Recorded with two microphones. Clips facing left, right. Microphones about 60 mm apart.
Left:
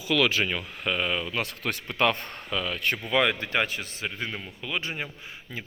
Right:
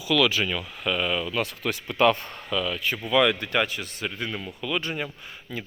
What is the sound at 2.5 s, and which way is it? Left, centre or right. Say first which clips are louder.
A man's voice: right 1 dB; left.